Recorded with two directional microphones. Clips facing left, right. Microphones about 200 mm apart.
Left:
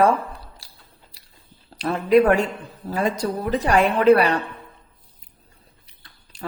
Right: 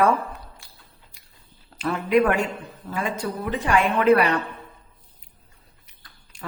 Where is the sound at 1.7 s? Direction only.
35° left (ahead or behind).